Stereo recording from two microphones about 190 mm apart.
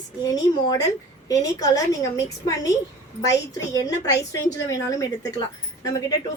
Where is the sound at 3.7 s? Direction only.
20° left (ahead or behind).